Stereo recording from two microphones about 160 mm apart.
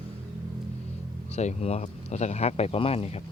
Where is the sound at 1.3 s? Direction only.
45° left (ahead or behind).